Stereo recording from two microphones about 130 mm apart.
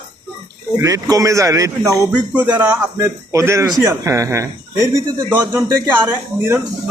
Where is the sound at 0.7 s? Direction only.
25° right (ahead or behind).